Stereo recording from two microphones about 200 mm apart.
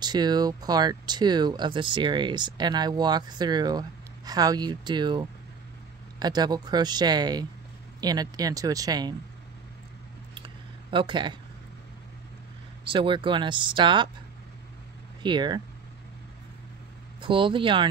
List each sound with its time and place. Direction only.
0.0 s speech: 20° right (ahead or behind)
10.4 s a sound: 25° right (ahead or behind)
12.8 s speech: 25° right (ahead or behind)
15.2 s speech: 20° right (ahead or behind)
17.2 s speech: 25° right (ahead or behind)